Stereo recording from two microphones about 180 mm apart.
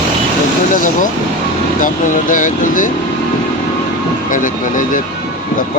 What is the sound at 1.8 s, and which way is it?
Speech, 45° left (ahead or behind).